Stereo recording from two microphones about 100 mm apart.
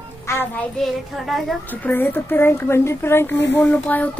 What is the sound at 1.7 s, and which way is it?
A woman's voice, 20° left (ahead or behind).